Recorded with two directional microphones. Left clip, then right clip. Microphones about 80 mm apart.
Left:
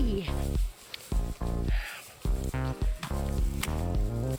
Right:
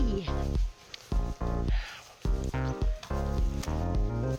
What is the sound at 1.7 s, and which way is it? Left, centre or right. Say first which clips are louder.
Music: left 2 dB; right.